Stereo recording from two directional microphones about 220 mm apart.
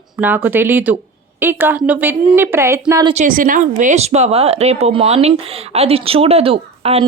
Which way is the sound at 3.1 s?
35° right (ahead or behind).